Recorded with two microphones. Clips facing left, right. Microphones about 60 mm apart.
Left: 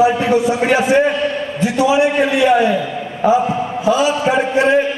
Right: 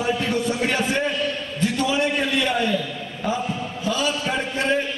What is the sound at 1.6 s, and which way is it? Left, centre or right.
A man's voice, centre.